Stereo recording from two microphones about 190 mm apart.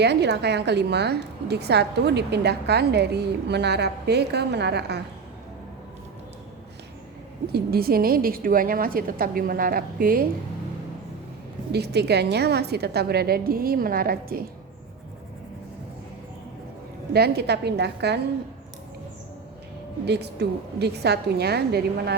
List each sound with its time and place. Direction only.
0.0 s a woman's voice: 60° right (ahead or behind)
7.5 s a woman's voice: 55° right (ahead or behind)
11.7 s a woman's voice: 60° right (ahead or behind)
17.1 s a woman's voice: 55° right (ahead or behind)
20.1 s a woman's voice: 60° right (ahead or behind)